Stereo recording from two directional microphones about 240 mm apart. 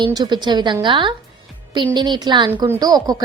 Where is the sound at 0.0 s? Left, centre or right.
Centre.